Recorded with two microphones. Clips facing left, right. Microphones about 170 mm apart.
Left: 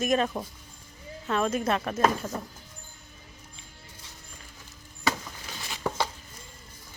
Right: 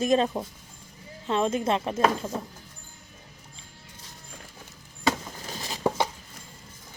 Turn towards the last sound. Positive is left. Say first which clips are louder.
# right 4 dB
turn(degrees=-35)  # may be behind; listen again after turning